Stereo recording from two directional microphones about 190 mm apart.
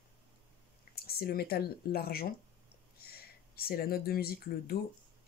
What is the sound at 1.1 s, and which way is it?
Speech, 55° left (ahead or behind).